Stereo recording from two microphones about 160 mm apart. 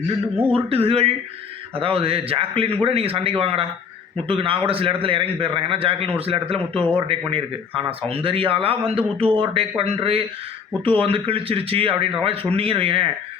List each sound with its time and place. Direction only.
0.5 s a man's voice: 35° right (ahead or behind)